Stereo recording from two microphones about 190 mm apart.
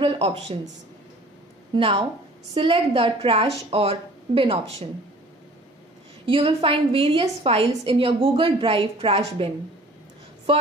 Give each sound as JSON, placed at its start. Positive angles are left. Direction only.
{"t": 0.0, "sound": "a woman's voice", "side_deg": -30}
{"t": 1.8, "sound": "a woman's voice", "side_deg": -30}
{"t": 6.2, "sound": "a woman's voice", "side_deg": -30}